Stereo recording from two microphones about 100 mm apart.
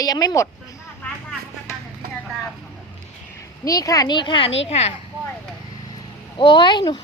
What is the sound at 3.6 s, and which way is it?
Speech, 35° left (ahead or behind).